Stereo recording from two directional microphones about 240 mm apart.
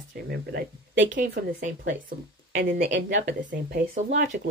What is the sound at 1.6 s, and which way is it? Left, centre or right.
Speech, right.